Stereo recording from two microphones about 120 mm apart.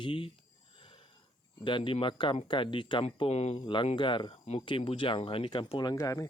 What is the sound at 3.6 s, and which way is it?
Speech, 40° left (ahead or behind).